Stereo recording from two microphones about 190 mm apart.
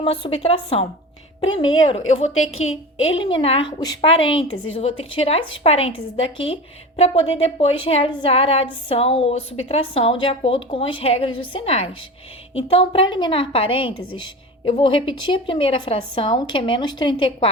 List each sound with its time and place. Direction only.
0.0 s speech: 30° left (ahead or behind)
1.9 s speech: 35° left (ahead or behind)
2.3 s a woman's voice: 90° left
3.2 s a woman's voice: 30° left (ahead or behind)